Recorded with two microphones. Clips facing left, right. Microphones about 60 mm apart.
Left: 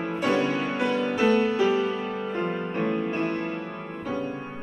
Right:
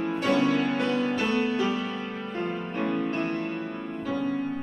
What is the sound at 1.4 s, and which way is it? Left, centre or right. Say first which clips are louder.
Music: left 4 dB; left.